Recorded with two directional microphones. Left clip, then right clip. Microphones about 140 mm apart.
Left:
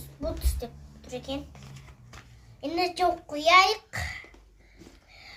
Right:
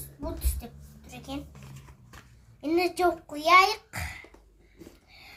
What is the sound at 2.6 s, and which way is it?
A child's voice, 15° left (ahead or behind).